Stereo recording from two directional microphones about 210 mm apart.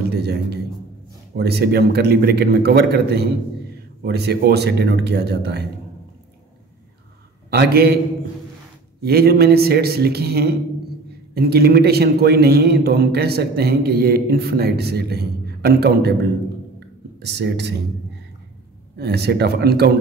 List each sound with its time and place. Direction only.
0.1 s a man's voice: 50° right (ahead or behind)
7.5 s a man's voice: 50° right (ahead or behind)
9.0 s a man's voice: 45° right (ahead or behind)
17.2 s speech: 55° right (ahead or behind)
18.9 s a man's voice: 50° right (ahead or behind)